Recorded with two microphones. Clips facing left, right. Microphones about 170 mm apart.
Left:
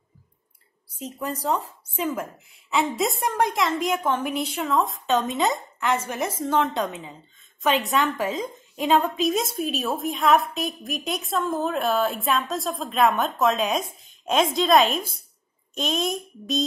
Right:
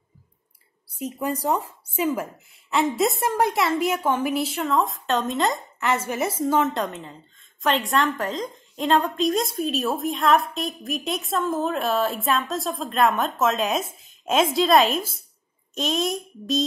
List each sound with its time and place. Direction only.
0.8 s a woman's voice: 10° right (ahead or behind)